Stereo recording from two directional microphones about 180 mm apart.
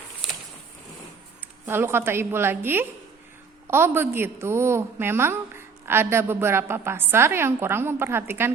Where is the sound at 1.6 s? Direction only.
15° right (ahead or behind).